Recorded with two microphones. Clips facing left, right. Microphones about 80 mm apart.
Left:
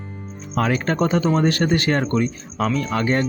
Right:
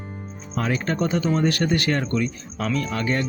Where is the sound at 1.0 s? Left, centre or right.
Left.